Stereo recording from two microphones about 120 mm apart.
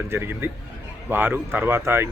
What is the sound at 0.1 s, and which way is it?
A man's voice, 20° right (ahead or behind).